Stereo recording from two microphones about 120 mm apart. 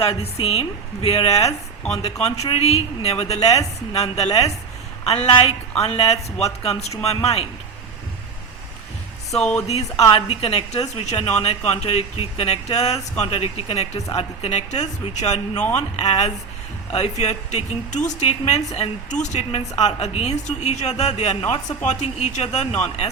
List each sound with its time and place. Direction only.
0.0 s speech: 55° left (ahead or behind)
9.3 s speech: 5° left (ahead or behind)
9.6 s speech: 60° left (ahead or behind)
21.8 s speech: 75° left (ahead or behind); by 23.0 s 55° left (ahead or behind)